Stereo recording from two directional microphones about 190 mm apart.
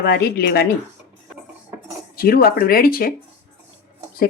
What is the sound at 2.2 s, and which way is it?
Speech, 50° left (ahead or behind).